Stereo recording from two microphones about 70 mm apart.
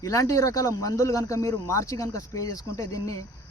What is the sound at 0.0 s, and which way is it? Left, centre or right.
Speech, left.